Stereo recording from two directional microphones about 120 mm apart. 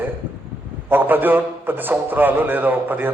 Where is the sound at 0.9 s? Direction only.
15° right (ahead or behind).